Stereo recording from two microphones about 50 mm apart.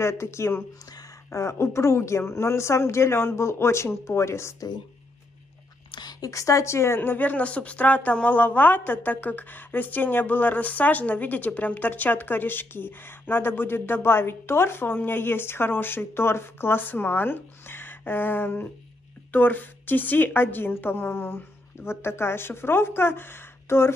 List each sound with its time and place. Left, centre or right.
0.0 s speech: left
1.3 s speech: left
6.3 s speech: left
7.0 s speech: left
7.3 s speech: left
8.4 s a woman's voice: left
16.7 s a woman's voice: left